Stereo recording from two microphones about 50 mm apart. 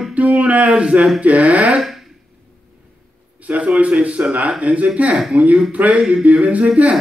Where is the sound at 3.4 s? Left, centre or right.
Right.